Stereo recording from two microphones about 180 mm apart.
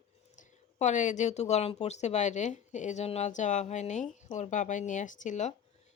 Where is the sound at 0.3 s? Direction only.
40° left (ahead or behind).